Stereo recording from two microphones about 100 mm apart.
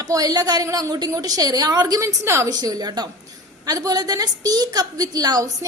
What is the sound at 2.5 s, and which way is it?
A woman's voice, 40° right (ahead or behind).